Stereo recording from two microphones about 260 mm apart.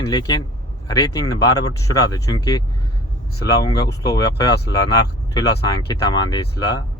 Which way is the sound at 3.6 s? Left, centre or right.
Centre.